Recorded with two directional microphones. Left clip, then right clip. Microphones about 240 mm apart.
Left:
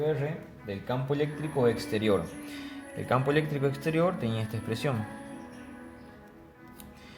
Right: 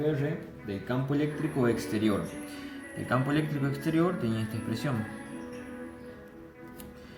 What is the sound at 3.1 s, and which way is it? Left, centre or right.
A man's voice, left.